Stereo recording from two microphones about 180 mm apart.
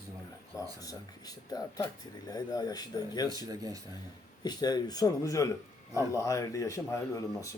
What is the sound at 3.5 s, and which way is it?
Speech, 20° right (ahead or behind).